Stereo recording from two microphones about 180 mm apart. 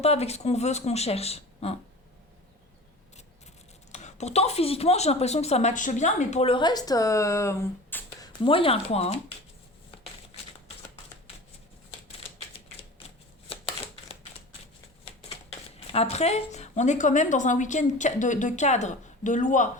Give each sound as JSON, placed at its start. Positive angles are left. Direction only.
{"t": 0.0, "sound": "a woman's voice", "side_deg": 35}
{"t": 3.9, "sound": "a woman's voice", "side_deg": 40}
{"t": 8.3, "sound": "a woman's voice", "side_deg": 30}
{"t": 13.5, "sound": "a sound", "side_deg": 30}
{"t": 15.9, "sound": "a woman's voice", "side_deg": 35}